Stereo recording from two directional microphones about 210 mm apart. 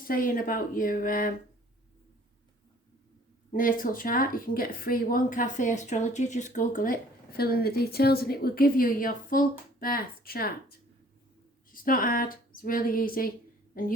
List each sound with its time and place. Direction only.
0.0 s speech: 40° left (ahead or behind)
3.5 s speech: 40° left (ahead or behind)